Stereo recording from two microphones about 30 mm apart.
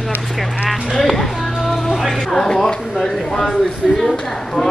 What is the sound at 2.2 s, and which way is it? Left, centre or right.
A man's voice, centre.